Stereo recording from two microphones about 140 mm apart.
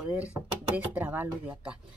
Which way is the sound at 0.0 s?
10° right (ahead or behind).